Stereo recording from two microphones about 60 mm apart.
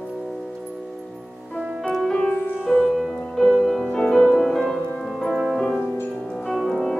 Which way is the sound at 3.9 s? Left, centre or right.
Centre.